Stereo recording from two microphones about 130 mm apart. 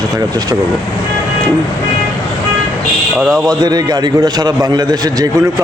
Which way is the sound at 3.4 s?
30° right (ahead or behind).